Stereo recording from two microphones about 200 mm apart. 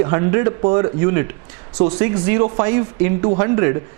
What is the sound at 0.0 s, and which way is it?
Speech, 20° right (ahead or behind).